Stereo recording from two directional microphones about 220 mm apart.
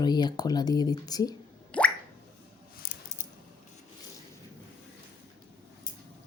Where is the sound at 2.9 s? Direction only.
50° left (ahead or behind).